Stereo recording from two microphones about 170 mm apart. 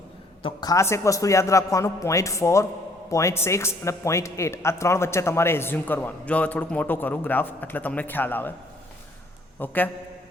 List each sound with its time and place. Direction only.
0.4 s speech: 20° left (ahead or behind)
9.6 s speech: 10° left (ahead or behind)